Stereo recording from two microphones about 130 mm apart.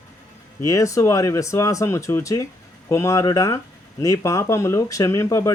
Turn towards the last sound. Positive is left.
turn(degrees=20)  # may be behind; listen again after turning